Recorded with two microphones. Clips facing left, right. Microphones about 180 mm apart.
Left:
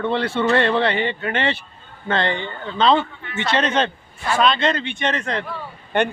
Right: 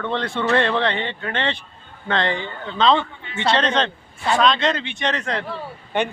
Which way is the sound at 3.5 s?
5° left (ahead or behind).